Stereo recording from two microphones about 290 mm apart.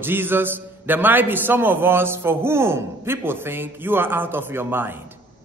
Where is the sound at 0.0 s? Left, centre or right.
Centre.